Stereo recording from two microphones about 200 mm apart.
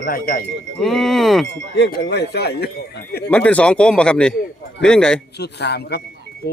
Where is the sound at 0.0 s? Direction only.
45° left (ahead or behind).